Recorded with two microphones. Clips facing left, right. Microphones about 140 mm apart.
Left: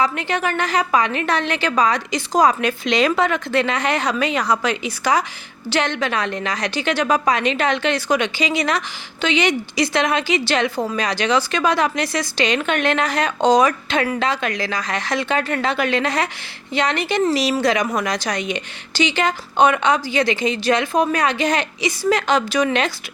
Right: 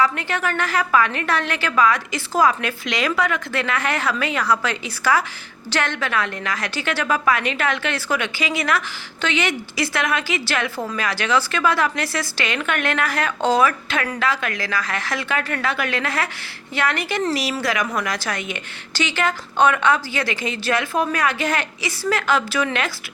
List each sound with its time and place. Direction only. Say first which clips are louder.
0.0 s a woman's voice: left 1 dB; 20° left (ahead or behind)